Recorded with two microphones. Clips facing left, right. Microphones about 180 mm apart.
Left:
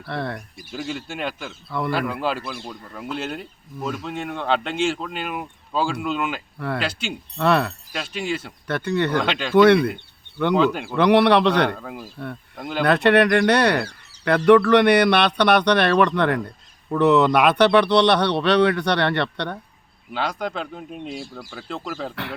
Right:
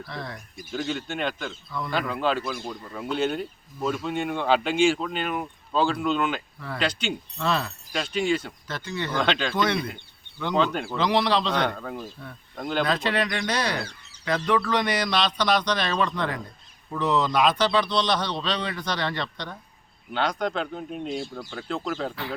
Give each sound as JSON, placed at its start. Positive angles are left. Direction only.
{"t": 0.0, "sound": "speech", "side_deg": 65}
{"t": 0.7, "sound": "speech", "side_deg": 5}
{"t": 7.3, "sound": "speech", "side_deg": 65}
{"t": 7.9, "sound": "speech", "side_deg": 5}
{"t": 8.6, "sound": "speech", "side_deg": 65}
{"t": 9.2, "sound": "speech", "side_deg": 5}
{"t": 9.6, "sound": "speech", "side_deg": 65}
{"t": 10.5, "sound": "speech", "side_deg": 5}
{"t": 10.9, "sound": "speech", "side_deg": 65}
{"t": 11.8, "sound": "speech", "side_deg": 5}
{"t": 12.8, "sound": "speech", "side_deg": 65}
{"t": 20.1, "sound": "speech", "side_deg": 5}
{"t": 22.1, "sound": "speech", "side_deg": 65}